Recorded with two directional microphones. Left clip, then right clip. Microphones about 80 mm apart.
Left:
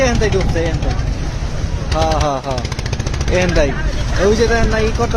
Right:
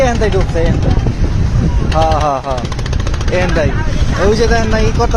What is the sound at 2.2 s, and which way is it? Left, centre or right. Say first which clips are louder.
Speech: right 4 dB; centre.